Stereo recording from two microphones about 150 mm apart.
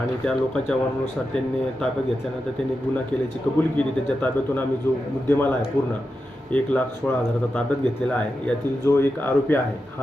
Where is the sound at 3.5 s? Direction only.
10° left (ahead or behind).